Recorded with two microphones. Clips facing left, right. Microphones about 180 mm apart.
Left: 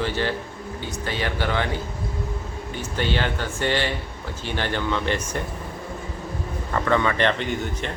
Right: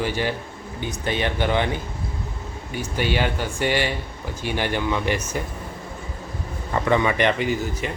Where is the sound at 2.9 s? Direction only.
10° right (ahead or behind).